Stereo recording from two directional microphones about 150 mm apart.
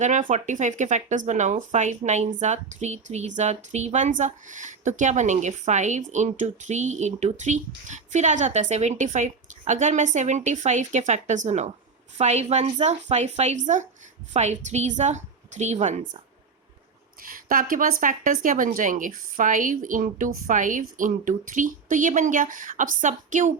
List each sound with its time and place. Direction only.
0.0 s speech: 55° right (ahead or behind)
17.2 s speech: 70° right (ahead or behind)